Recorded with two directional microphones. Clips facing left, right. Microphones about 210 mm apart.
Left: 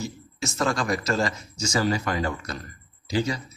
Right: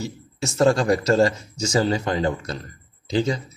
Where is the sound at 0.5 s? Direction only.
30° right (ahead or behind).